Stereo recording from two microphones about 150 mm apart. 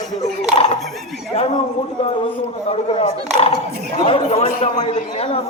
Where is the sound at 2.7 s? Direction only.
40° left (ahead or behind).